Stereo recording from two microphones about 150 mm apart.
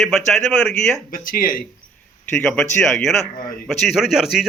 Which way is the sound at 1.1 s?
70° left (ahead or behind).